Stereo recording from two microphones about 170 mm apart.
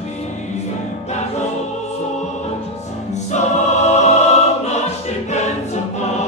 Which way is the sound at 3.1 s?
40° left (ahead or behind).